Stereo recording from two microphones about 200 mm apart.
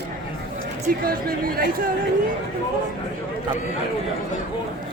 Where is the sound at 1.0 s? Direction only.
45° right (ahead or behind).